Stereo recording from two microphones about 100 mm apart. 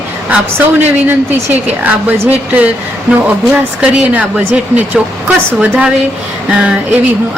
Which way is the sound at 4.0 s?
15° right (ahead or behind).